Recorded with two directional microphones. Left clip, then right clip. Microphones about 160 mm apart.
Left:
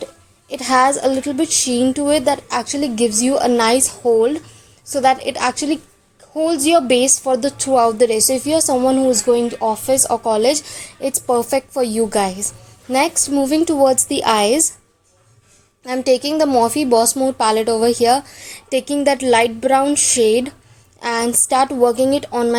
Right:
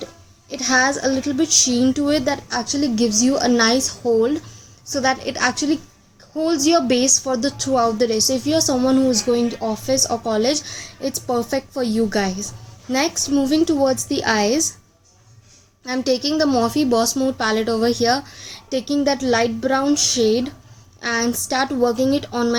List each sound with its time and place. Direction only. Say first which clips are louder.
0.5 s a woman's voice: left 4 dB; 20° left (ahead or behind)
3.1 s a woman's voice: even; 40° left (ahead or behind)
3.3 s a woman's voice: left 5 dB; 15° left (ahead or behind)
15.9 s a woman's voice: left 4 dB; 20° left (ahead or behind)
18.4 s a sound: left 4 dB; 30° right (ahead or behind)
19.0 s a woman's voice: left 6 dB; 20° left (ahead or behind)